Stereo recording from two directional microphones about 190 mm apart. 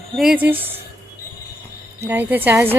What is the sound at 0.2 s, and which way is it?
Speech, 5° right (ahead or behind).